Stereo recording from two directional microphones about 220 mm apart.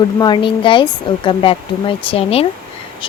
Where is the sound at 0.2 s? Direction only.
20° left (ahead or behind).